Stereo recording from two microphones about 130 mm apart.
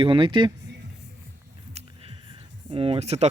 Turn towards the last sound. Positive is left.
turn(degrees=-55)  # may be behind; listen again after turning